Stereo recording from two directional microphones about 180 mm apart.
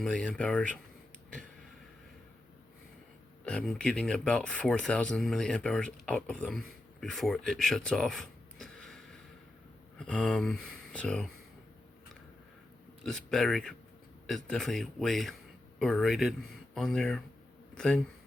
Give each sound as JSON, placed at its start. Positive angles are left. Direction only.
{"t": 0.0, "sound": "speech", "side_deg": 5}
{"t": 3.4, "sound": "speech", "side_deg": 5}
{"t": 13.1, "sound": "speech", "side_deg": 0}